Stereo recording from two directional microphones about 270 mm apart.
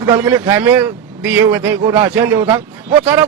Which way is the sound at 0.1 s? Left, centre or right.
Centre.